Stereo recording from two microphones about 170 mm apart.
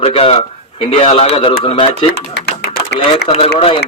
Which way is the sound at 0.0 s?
35° left (ahead or behind).